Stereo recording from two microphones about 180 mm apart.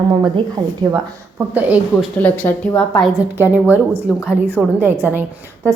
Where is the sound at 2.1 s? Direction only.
10° left (ahead or behind).